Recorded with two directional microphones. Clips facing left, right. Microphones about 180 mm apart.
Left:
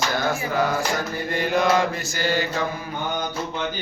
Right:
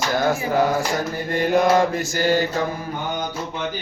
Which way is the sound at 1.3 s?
50° right (ahead or behind).